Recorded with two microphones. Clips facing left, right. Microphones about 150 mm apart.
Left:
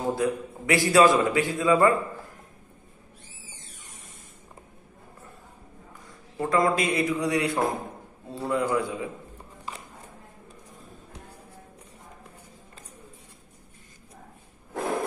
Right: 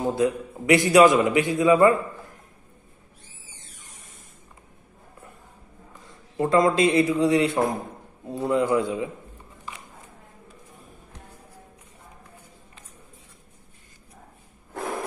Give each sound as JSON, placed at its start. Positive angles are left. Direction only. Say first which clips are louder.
{"t": 0.0, "sound": "a man's voice", "louder": "right 3 dB", "side_deg": -20}
{"t": 6.0, "sound": "a man's voice", "louder": "right 5 dB", "side_deg": -25}